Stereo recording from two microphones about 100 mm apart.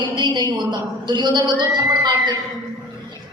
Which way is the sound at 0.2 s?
50° right (ahead or behind).